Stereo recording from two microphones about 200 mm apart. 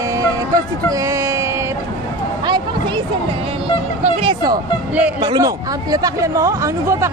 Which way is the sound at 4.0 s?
25° right (ahead or behind).